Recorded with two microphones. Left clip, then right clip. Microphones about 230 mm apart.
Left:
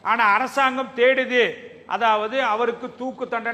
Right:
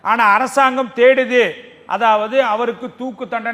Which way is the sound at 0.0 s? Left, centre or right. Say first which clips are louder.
Right 5 dB; right.